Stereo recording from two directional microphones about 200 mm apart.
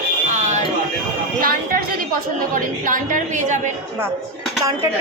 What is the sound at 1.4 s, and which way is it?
A woman's voice, 50° right (ahead or behind).